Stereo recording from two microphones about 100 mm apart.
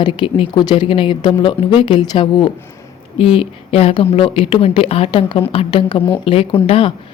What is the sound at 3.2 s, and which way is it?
A woman's voice, 65° left (ahead or behind).